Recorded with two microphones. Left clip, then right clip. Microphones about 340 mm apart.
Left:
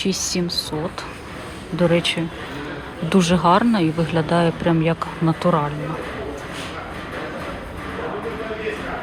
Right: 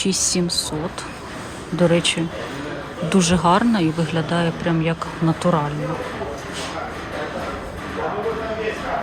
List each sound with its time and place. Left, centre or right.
0.0 s speech: centre
1.8 s speech: centre